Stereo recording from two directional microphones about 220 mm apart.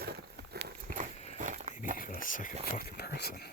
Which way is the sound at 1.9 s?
40° left (ahead or behind).